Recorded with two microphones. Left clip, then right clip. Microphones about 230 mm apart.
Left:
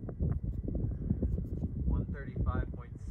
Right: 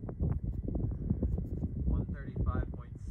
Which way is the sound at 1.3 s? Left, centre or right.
Left.